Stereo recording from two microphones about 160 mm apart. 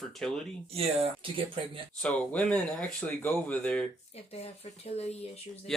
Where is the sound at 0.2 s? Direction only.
5° left (ahead or behind).